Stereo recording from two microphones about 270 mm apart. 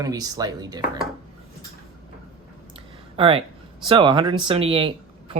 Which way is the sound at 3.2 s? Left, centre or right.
Right.